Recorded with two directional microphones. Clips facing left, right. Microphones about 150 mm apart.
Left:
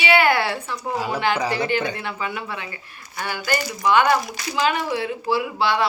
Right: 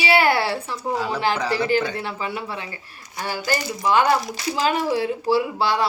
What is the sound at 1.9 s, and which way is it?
Speech, 35° right (ahead or behind).